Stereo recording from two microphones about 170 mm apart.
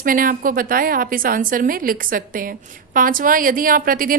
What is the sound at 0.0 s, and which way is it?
A woman's voice, 55° right (ahead or behind).